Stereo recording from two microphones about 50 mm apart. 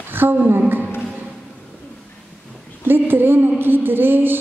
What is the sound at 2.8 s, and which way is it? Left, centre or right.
A woman's voice, right.